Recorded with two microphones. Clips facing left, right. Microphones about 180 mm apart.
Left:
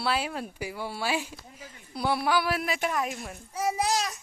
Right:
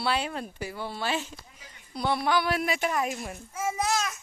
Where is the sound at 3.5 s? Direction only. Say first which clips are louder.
Left 2 dB; 35° left (ahead or behind).